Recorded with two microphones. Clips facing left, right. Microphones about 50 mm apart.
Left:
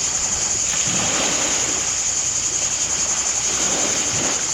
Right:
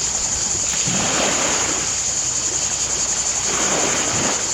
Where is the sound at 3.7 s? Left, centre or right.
Right.